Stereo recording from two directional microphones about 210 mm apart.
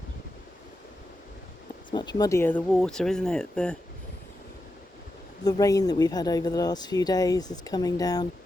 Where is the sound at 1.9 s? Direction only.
20° left (ahead or behind); by 3.8 s 5° left (ahead or behind).